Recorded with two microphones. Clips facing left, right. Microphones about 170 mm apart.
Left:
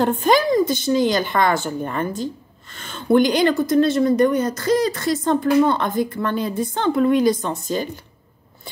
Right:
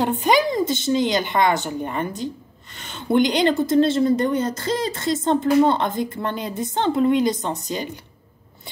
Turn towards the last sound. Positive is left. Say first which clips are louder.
# left 3 dB
turn(degrees=-20)  # may be behind; listen again after turning